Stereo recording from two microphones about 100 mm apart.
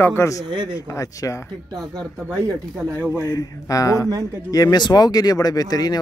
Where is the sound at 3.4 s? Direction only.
35° left (ahead or behind).